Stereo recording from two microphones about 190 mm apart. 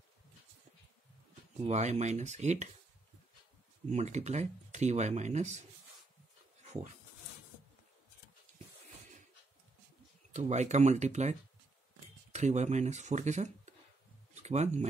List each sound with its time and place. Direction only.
1.6 s speech: 35° right (ahead or behind)
3.9 s speech: 35° right (ahead or behind)
6.6 s dog: 35° right (ahead or behind)
10.3 s speech: 35° right (ahead or behind)